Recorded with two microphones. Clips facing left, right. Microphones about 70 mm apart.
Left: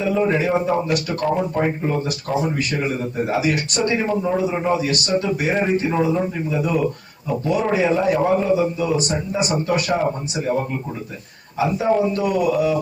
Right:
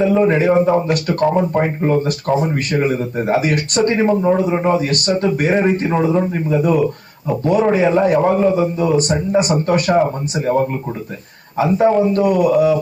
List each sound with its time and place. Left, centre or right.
0.3 s a man's voice: right
4.2 s a man's voice: right
4.6 s a man's voice: right